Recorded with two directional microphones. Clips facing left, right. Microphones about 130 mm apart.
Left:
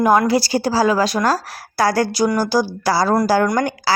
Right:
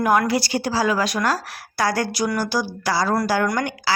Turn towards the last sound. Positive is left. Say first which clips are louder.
# left 4 dB
turn(degrees=40)  # may be behind; listen again after turning